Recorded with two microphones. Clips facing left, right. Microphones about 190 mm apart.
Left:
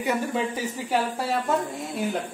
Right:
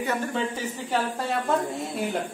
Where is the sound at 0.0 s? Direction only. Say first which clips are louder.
Left 2 dB; 10° left (ahead or behind).